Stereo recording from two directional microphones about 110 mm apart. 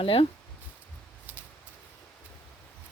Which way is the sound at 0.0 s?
55° left (ahead or behind).